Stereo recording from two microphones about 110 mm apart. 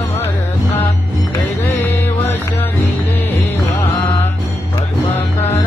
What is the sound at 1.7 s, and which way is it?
Music, 15° left (ahead or behind).